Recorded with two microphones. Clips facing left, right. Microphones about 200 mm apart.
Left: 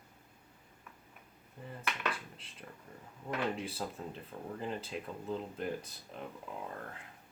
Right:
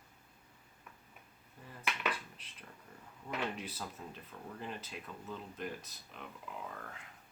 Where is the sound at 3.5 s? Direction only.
30° left (ahead or behind).